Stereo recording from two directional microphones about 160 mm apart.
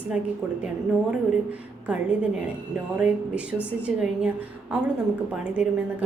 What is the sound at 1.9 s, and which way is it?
A woman's voice, 5° right (ahead or behind).